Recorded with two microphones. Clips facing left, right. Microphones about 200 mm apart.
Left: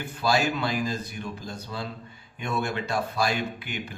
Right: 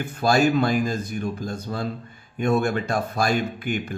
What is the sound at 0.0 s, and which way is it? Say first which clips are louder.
Speech: right 5 dB; 50° right (ahead or behind).